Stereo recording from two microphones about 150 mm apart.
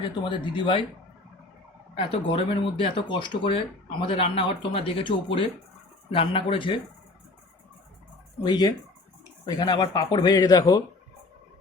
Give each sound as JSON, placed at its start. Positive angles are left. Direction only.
{"t": 0.0, "sound": "speech", "side_deg": 35}
{"t": 2.0, "sound": "speech", "side_deg": 35}
{"t": 8.4, "sound": "speech", "side_deg": 25}